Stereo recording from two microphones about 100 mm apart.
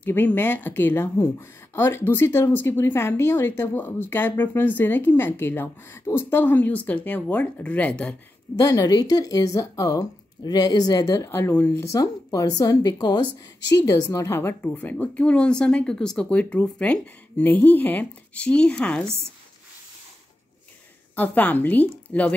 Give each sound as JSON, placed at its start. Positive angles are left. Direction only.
{"t": 0.0, "sound": "speech", "side_deg": 15}
{"t": 8.5, "sound": "speech", "side_deg": 35}
{"t": 11.1, "sound": "speech", "side_deg": 25}
{"t": 11.5, "sound": "a woman's voice", "side_deg": 15}
{"t": 11.8, "sound": "speech", "side_deg": 35}
{"t": 13.8, "sound": "a woman's voice", "side_deg": 30}
{"t": 21.2, "sound": "a woman's voice", "side_deg": 15}